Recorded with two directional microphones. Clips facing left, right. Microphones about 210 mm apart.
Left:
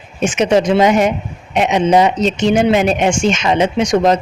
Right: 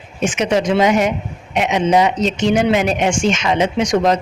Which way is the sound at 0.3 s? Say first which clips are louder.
Left 4 dB; 30° left (ahead or behind).